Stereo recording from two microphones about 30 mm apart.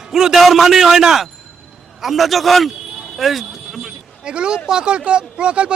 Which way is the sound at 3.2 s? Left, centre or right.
Centre.